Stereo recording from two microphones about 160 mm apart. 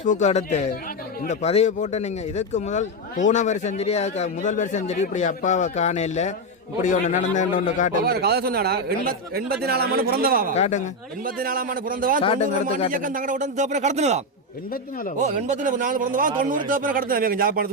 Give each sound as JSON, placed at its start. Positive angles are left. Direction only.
{"t": 0.0, "sound": "speech", "side_deg": 50}
{"t": 8.0, "sound": "a man's voice", "side_deg": -80}
{"t": 10.5, "sound": "speech", "side_deg": 45}
{"t": 11.3, "sound": "speech", "side_deg": -65}
{"t": 12.2, "sound": "speech", "side_deg": 35}
{"t": 12.9, "sound": "speech", "side_deg": -60}
{"t": 15.2, "sound": "speech", "side_deg": -50}